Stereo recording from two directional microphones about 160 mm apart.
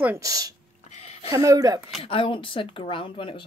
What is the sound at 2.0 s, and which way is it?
Speech, 35° left (ahead or behind).